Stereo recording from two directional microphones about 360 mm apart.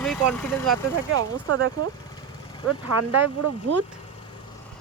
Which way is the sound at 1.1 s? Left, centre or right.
Right.